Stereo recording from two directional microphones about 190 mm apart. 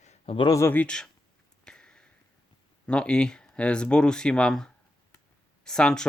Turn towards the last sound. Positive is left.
turn(degrees=5)  # may be behind; listen again after turning